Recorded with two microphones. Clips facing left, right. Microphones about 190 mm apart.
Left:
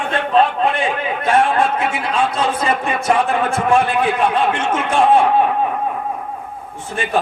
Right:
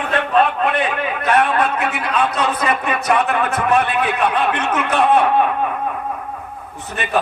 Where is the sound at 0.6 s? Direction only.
25° left (ahead or behind).